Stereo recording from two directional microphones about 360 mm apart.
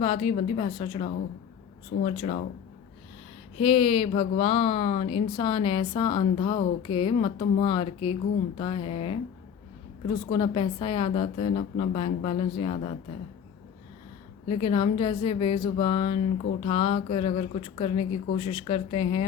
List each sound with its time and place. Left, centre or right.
0.0 s speech: centre
3.6 s speech: centre
10.2 s speech: centre
14.4 s speech: centre